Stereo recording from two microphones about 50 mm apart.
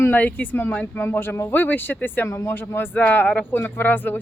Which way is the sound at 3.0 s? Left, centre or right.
Left.